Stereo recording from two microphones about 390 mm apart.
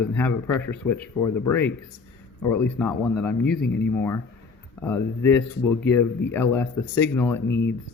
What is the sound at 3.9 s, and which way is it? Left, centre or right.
Speech, centre.